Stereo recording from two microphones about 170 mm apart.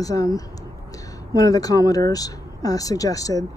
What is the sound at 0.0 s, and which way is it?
Speech, 20° left (ahead or behind).